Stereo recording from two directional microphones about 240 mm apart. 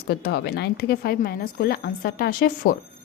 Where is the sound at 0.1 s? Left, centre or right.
Left.